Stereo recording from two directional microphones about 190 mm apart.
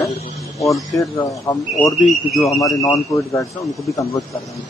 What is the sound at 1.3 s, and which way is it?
Speech, 15° left (ahead or behind).